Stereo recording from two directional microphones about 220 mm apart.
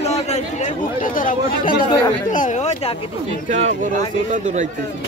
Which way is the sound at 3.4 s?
30° right (ahead or behind).